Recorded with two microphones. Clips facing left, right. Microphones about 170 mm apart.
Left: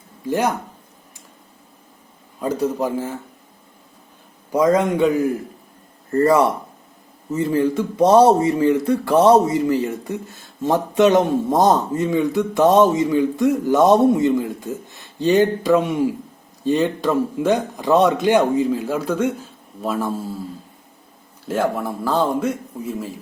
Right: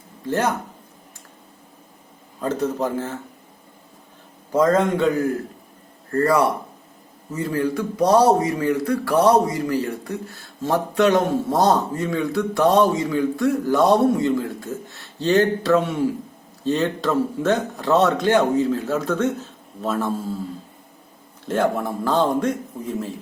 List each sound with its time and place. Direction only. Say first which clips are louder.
0.3 s speech: left 2 dB; 10° left (ahead or behind)
2.4 s speech: left 2 dB; 10° left (ahead or behind)
4.5 s speech: left 1 dB; 15° left (ahead or behind)
21.4 s speech: even; 5° left (ahead or behind)